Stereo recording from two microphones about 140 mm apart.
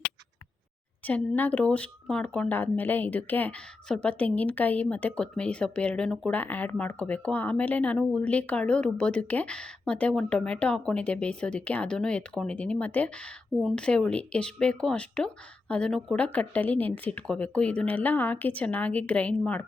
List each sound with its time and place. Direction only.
1.0 s speech: 10° left (ahead or behind)